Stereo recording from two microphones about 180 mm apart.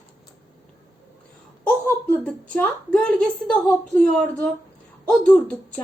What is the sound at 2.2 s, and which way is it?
A woman's voice, 5° left (ahead or behind).